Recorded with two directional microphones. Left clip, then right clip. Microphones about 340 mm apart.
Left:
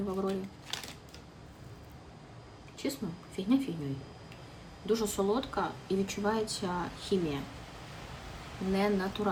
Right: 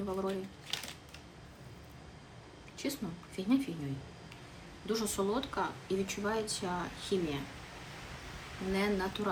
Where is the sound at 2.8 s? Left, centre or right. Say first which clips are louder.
Left 2 dB; centre.